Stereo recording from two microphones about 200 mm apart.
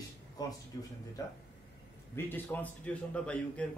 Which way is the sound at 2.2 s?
10° left (ahead or behind).